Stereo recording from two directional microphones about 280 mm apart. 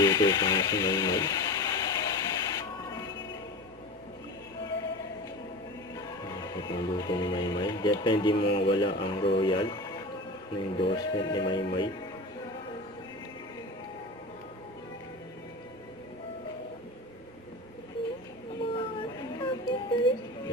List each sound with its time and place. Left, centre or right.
0.0 s a sound: centre
6.2 s speech: centre
10.8 s speech: centre
18.6 s music: centre